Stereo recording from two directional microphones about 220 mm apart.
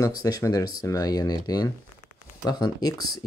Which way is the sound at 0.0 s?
15° left (ahead or behind).